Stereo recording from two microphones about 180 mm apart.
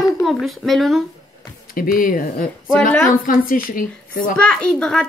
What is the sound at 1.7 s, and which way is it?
A woman's voice, 50° left (ahead or behind).